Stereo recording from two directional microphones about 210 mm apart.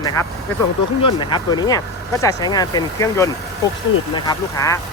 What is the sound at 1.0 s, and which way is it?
Speech, 20° left (ahead or behind).